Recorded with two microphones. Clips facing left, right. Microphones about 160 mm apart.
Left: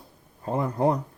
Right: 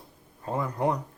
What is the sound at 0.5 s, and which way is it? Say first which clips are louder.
Speech: left 4 dB; 30° left (ahead or behind).